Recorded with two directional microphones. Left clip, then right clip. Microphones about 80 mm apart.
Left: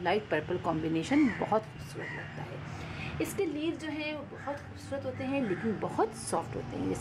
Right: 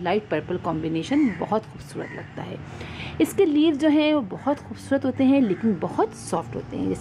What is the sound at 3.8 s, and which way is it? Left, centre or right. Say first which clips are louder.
Speech: right 17 dB; right.